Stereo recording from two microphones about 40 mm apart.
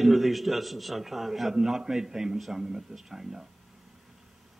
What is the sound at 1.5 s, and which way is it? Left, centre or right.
A man's voice, centre.